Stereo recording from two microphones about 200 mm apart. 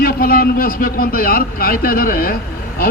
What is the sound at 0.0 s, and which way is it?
A man's voice, 45° left (ahead or behind).